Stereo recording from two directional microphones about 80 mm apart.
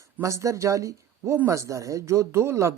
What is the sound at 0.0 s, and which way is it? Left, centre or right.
Speech, right.